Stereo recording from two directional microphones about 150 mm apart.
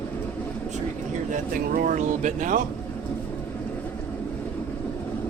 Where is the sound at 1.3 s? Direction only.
60° right (ahead or behind).